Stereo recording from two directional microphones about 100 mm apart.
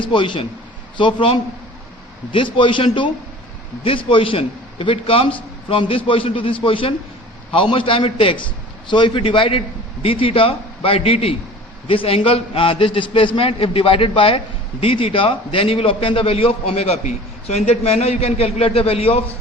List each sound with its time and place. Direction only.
0.0 s a man's voice: 55° left (ahead or behind)
8.9 s a man's voice: 55° left (ahead or behind); by 19.2 s 80° left